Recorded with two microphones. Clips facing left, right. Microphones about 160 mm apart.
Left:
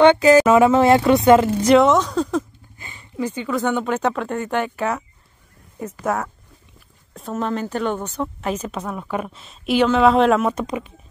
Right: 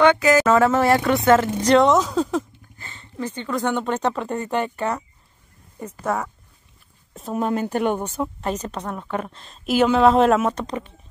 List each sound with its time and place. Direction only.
0.0 s speech: 30° left (ahead or behind)
0.5 s speech: 15° left (ahead or behind); by 2.4 s 5° right (ahead or behind)
2.8 s a woman's voice: 10° left (ahead or behind)
6.0 s a woman's voice: centre (ahead or behind)
7.3 s speech: 10° right (ahead or behind)
8.4 s a woman's voice: centre (ahead or behind)